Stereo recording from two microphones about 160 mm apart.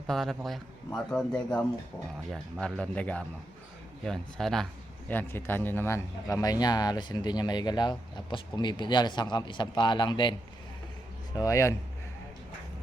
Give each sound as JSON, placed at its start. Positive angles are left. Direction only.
{"t": 0.1, "sound": "a man's voice", "side_deg": 0}
{"t": 11.3, "sound": "a man's voice", "side_deg": 20}